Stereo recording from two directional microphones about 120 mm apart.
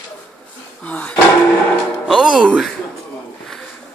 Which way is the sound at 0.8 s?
10° left (ahead or behind).